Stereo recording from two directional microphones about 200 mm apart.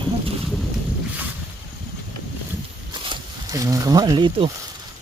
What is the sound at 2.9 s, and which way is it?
Snake, 25° right (ahead or behind).